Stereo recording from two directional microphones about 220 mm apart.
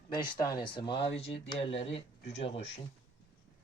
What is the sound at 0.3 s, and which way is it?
Speech, 15° left (ahead or behind).